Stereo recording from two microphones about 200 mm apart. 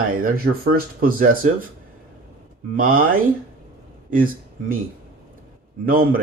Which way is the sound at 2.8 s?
45° right (ahead or behind).